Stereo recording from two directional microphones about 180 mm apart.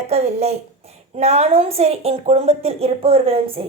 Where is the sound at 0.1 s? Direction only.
35° right (ahead or behind).